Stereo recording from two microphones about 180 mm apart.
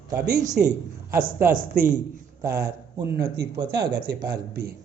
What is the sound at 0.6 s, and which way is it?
Speech, 5° right (ahead or behind).